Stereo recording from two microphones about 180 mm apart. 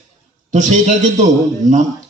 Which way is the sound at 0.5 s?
40° right (ahead or behind).